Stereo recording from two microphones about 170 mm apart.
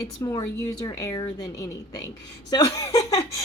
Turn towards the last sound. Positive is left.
turn(degrees=20)  # may be behind; listen again after turning